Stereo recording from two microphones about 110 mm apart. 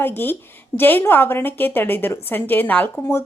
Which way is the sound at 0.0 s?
20° left (ahead or behind).